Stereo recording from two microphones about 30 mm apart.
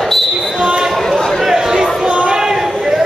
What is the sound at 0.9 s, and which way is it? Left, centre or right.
Chatter, centre.